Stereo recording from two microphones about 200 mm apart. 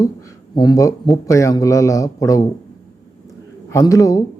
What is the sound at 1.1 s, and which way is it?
Speech, 15° left (ahead or behind).